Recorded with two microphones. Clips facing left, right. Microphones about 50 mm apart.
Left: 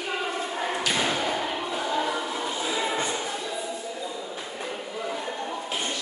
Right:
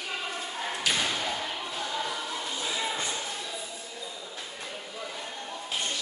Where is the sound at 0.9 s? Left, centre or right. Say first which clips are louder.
Left 4 dB; left.